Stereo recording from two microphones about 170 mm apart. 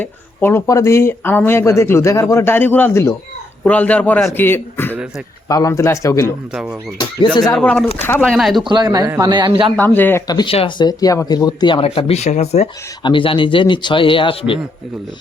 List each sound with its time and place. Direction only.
0.0 s speech: 15° left (ahead or behind)
6.5 s speech: 5° right (ahead or behind)
8.6 s a man's voice: 25° right (ahead or behind)
9.7 s speech: 10° left (ahead or behind)
10.2 s speech: 25° left (ahead or behind)